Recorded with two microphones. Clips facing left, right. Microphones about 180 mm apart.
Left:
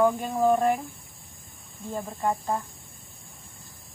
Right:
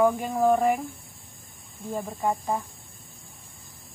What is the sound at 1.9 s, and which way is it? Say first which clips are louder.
Speech: right 1 dB; 10° right (ahead or behind).